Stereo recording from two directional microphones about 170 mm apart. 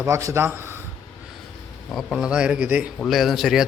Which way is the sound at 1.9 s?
Centre (ahead or behind).